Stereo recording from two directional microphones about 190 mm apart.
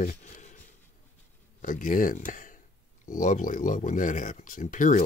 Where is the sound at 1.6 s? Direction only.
45° left (ahead or behind).